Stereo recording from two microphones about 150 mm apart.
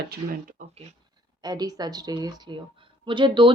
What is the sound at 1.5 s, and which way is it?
Speech, 25° right (ahead or behind).